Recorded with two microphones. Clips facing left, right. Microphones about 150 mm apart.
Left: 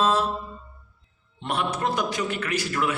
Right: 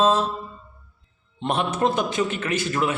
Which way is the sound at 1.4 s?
25° right (ahead or behind).